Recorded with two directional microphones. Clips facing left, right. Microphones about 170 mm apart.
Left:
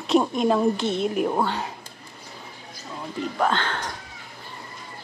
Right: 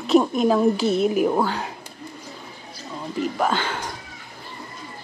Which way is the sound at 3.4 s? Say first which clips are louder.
Left 2 dB; 5° right (ahead or behind).